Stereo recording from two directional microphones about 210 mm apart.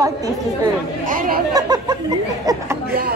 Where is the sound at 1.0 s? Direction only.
40° right (ahead or behind).